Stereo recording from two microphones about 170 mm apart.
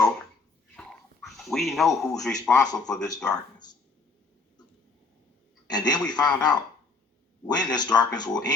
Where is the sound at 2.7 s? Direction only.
5° left (ahead or behind).